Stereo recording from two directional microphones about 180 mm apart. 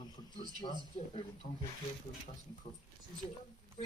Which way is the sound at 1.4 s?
50° left (ahead or behind).